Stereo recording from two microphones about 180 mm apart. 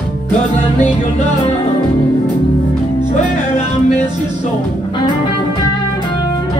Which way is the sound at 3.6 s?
40° left (ahead or behind).